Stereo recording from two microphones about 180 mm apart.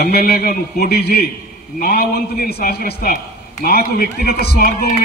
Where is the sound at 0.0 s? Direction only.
60° left (ahead or behind).